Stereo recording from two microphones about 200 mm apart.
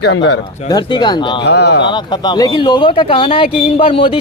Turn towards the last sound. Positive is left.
turn(degrees=25)  # may be behind; listen again after turning